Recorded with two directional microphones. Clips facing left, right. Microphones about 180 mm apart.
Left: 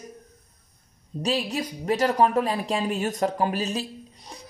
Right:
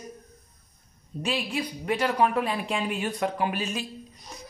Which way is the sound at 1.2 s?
40° left (ahead or behind).